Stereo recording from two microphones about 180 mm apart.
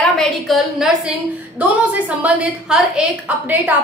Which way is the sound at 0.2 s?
Centre (ahead or behind).